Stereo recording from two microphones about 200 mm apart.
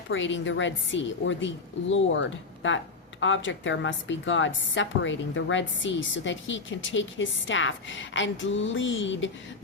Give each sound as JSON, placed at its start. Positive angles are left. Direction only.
{"t": 0.1, "sound": "speech", "side_deg": 70}